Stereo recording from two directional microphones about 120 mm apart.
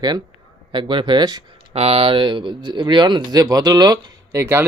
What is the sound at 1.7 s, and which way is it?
Speech, 55° right (ahead or behind).